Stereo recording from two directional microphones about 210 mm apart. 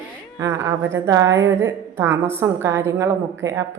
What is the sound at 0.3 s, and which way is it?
A woman's voice, 15° right (ahead or behind).